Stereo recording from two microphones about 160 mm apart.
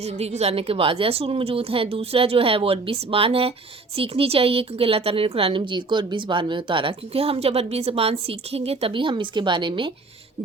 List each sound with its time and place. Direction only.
0.0 s a woman's voice: 40° right (ahead or behind)